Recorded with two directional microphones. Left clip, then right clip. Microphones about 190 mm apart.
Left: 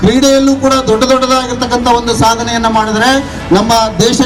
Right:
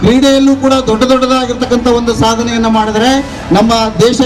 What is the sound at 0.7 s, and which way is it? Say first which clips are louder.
A man's voice: even; 20° right (ahead or behind).